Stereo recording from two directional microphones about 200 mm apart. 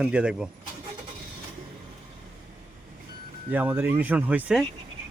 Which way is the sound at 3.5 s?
10° right (ahead or behind).